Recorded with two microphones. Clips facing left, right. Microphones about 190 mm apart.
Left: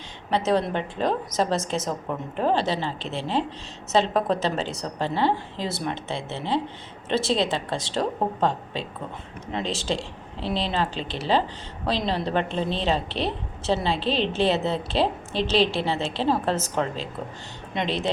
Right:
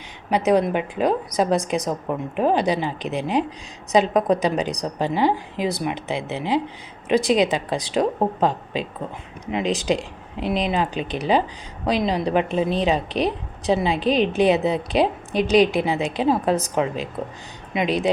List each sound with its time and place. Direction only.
0.3 s a woman's voice: 15° right (ahead or behind)